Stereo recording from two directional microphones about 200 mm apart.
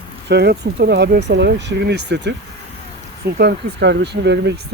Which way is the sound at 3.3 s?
55° right (ahead or behind).